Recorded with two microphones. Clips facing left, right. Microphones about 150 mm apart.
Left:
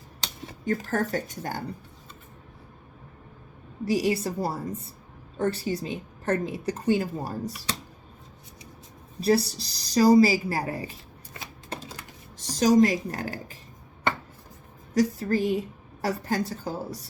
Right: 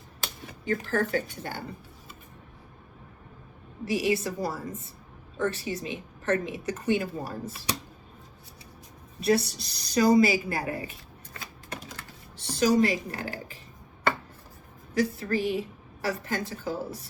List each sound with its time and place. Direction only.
0.6 s speech: 45° left (ahead or behind)
3.8 s a woman's voice: 35° left (ahead or behind)
9.2 s a woman's voice: 35° left (ahead or behind)
11.3 s typewriter: 30° left (ahead or behind)
12.4 s speech: 40° left (ahead or behind)
14.9 s a woman's voice: 40° left (ahead or behind)